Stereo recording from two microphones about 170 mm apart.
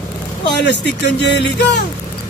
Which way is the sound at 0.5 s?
90° left.